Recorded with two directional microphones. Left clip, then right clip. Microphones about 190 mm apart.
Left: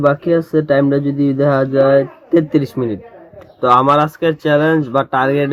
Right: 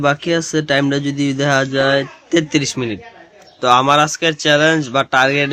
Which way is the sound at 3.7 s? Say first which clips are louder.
Left 1 dB; 25° right (ahead or behind).